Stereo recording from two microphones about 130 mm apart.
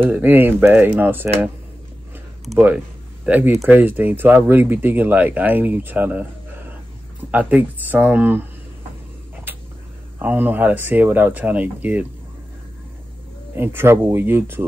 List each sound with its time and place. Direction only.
0.0 s speech: 15° right (ahead or behind)
3.3 s speech: 15° right (ahead or behind)
10.2 s speech: 15° right (ahead or behind)
13.6 s speech: 20° right (ahead or behind)